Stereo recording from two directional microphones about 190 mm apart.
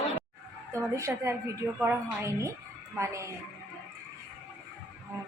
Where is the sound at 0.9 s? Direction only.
15° right (ahead or behind).